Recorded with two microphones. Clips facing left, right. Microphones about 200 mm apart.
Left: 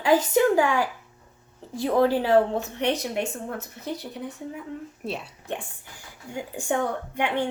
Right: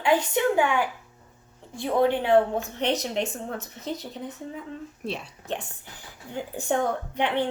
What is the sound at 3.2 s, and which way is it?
Speech, 10° left (ahead or behind).